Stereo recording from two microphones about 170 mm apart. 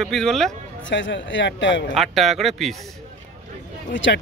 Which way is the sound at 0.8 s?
90° left.